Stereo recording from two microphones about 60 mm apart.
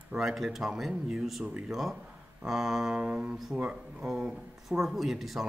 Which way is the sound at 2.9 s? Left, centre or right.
Centre.